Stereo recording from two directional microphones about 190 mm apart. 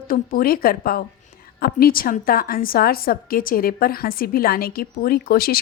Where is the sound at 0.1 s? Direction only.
50° left (ahead or behind).